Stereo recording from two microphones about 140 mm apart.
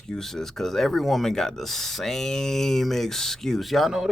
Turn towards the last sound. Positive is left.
turn(degrees=0)  # may be behind; listen again after turning